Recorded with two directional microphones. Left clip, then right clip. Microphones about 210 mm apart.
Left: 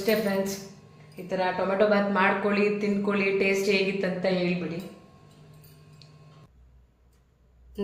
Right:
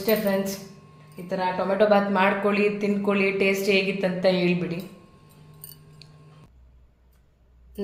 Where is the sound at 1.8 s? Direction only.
20° right (ahead or behind).